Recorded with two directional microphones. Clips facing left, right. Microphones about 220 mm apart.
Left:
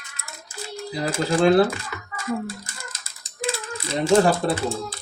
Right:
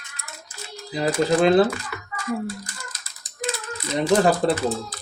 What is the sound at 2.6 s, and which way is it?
Ratchet, 25° left (ahead or behind).